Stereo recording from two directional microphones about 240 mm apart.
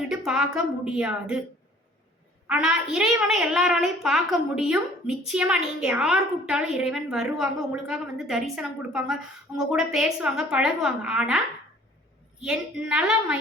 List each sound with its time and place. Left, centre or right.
0.3 s a woman's voice: centre
2.5 s a woman's voice: centre